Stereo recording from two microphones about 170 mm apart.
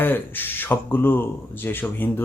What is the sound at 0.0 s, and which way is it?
Speech, 10° left (ahead or behind).